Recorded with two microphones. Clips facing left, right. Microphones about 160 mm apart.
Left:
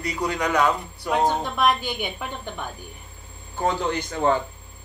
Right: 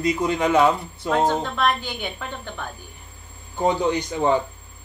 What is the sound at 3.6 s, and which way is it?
Speech, 15° right (ahead or behind).